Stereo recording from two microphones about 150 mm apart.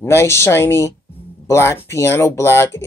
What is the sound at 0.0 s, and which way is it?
Speech, 15° left (ahead or behind).